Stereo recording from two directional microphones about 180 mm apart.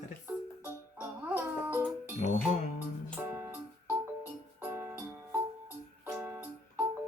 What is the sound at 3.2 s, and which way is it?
Music, 15° right (ahead or behind).